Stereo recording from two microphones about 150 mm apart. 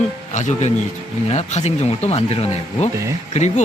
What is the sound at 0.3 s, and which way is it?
Speech, 55° left (ahead or behind).